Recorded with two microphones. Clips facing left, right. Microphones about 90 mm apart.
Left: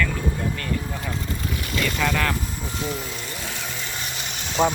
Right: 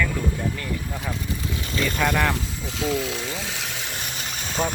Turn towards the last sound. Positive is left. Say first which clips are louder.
# left 5 dB
turn(degrees=35)  # may be behind; listen again after turning